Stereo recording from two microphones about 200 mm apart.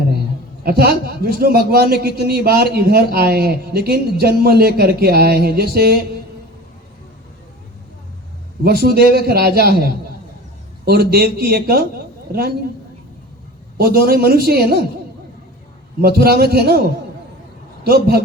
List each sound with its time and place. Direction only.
0.6 s a man's voice: 50° right (ahead or behind)
8.6 s a man's voice: 50° right (ahead or behind)
13.7 s a man's voice: 50° right (ahead or behind)
16.0 s a man's voice: 50° right (ahead or behind)
17.8 s a man's voice: 50° right (ahead or behind)